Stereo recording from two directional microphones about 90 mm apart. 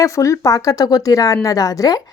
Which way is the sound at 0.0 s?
35° left (ahead or behind).